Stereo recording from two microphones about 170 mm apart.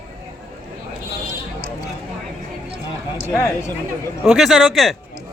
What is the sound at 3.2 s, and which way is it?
Speech, 15° left (ahead or behind).